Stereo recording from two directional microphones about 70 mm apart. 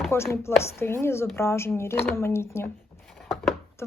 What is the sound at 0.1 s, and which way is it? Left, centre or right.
Speech, left.